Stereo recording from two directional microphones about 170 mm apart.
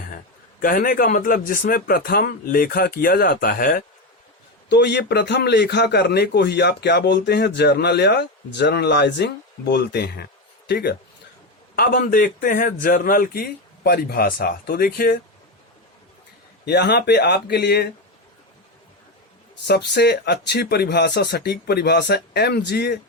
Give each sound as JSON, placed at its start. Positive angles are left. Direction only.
{"t": 0.6, "sound": "a man's voice", "side_deg": 55}
{"t": 4.7, "sound": "a man's voice", "side_deg": 80}
{"t": 11.8, "sound": "a man's voice", "side_deg": 55}
{"t": 16.6, "sound": "a man's voice", "side_deg": 75}
{"t": 19.6, "sound": "a man's voice", "side_deg": 75}